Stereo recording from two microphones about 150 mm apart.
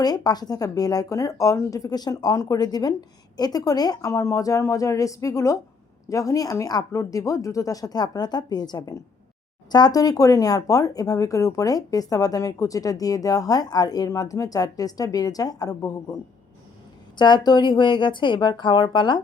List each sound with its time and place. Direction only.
0.0 s speech: 25° left (ahead or behind)
17.2 s speech: 30° left (ahead or behind)